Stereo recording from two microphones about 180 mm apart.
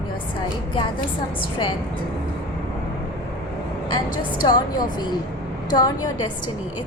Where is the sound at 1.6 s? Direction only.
25° left (ahead or behind).